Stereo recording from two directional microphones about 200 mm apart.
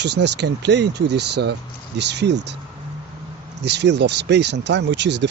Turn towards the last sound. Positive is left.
turn(degrees=-60)  # may be behind; listen again after turning